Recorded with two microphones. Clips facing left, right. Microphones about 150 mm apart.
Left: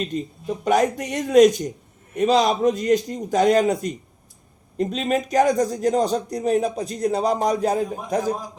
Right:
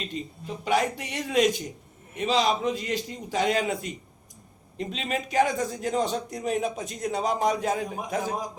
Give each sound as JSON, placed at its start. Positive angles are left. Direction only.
{"t": 0.0, "sound": "a man's voice", "side_deg": 45}